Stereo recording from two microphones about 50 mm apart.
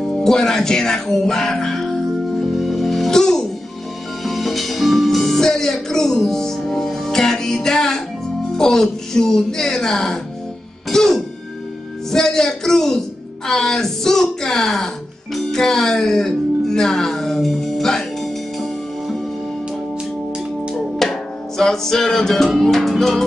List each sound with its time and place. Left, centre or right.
0.0 s music: centre
4.2 s music: centre
15.3 s speech: centre
21.1 s music: centre